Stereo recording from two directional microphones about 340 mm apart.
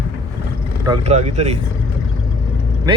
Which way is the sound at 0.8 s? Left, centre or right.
Centre.